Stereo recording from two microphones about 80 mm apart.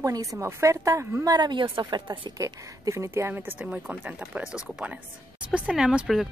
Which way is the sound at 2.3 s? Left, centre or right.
Right.